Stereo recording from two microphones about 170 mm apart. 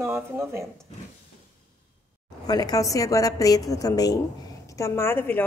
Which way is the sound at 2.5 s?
25° left (ahead or behind).